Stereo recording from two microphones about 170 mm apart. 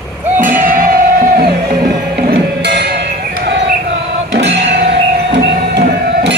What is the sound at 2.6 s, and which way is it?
Music, 80° right.